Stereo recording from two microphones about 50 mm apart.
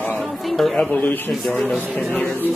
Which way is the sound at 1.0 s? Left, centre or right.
Left.